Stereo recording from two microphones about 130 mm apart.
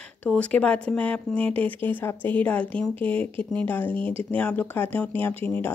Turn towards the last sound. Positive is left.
turn(degrees=15)  # may be behind; listen again after turning